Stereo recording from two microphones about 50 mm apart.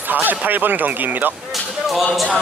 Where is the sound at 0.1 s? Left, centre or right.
Right.